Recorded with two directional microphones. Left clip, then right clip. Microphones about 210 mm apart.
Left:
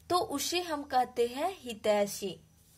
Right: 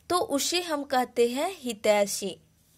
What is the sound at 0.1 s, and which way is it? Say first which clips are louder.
Speech: right 4 dB; 35° right (ahead or behind).